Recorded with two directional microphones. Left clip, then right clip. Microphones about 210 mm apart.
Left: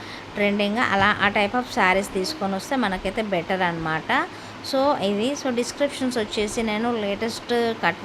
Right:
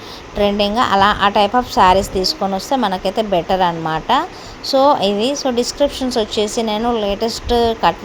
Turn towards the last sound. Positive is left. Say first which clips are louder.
# right 8 dB
turn(degrees=-15)  # may be behind; listen again after turning